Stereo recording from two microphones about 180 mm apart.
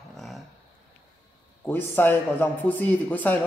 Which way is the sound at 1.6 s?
10° left (ahead or behind).